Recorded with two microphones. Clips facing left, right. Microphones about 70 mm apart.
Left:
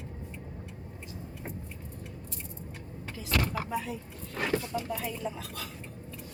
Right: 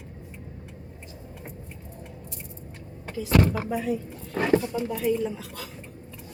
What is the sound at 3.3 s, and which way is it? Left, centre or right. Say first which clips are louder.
Speech: right 8 dB; right.